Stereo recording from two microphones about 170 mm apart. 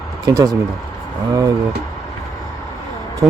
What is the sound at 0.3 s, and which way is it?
Speech, 20° right (ahead or behind).